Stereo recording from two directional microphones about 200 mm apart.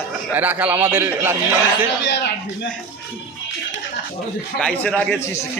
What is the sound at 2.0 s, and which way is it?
Speech, 60° left (ahead or behind).